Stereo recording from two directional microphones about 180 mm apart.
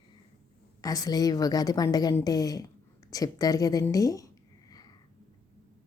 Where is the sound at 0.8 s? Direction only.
20° left (ahead or behind).